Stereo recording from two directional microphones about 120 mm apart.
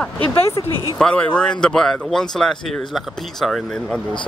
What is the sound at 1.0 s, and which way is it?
Speech, 10° left (ahead or behind).